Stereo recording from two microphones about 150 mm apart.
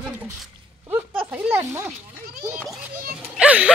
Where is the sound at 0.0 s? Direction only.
5° right (ahead or behind).